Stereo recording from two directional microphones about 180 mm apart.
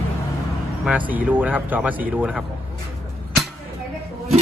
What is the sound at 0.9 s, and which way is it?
Speech, 10° right (ahead or behind).